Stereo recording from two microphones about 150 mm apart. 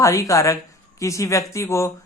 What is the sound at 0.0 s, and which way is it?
A woman's voice, 20° left (ahead or behind).